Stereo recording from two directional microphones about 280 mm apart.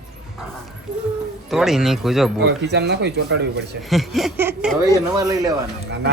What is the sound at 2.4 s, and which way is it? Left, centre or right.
Speech, right.